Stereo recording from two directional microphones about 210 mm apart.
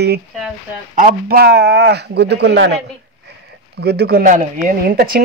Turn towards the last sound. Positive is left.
turn(degrees=-45)  # may be behind; listen again after turning